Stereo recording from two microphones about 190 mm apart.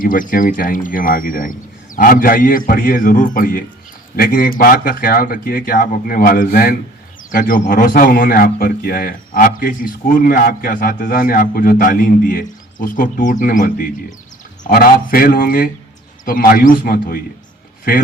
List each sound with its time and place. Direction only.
0.0 s a man's voice: 45° left (ahead or behind)